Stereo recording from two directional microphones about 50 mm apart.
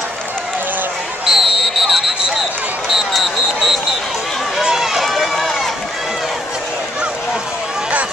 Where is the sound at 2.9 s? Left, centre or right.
Centre.